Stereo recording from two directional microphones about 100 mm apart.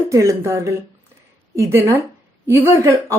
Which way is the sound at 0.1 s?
30° right (ahead or behind).